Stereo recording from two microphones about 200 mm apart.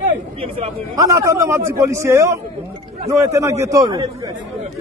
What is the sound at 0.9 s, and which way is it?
Speech, 15° right (ahead or behind).